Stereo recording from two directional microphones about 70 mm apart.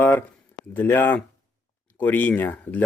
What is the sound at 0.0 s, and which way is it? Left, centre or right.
Speech, left.